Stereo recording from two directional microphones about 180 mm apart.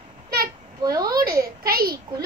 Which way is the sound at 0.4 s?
55° right (ahead or behind).